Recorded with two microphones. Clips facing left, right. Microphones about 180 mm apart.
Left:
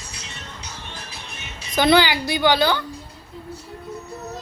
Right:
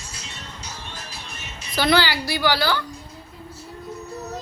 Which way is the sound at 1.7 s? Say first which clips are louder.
Left 3 dB; 20° left (ahead or behind).